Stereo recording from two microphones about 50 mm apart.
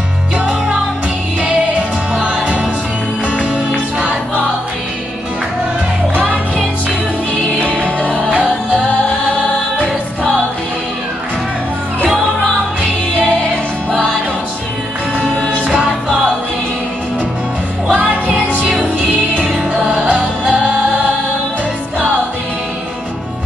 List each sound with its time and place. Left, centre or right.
1.4 s music: right
6.1 s music: right
7.7 s music: right
17.9 s music: right